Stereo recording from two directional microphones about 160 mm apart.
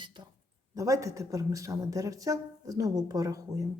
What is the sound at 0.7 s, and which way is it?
Speech, 20° right (ahead or behind).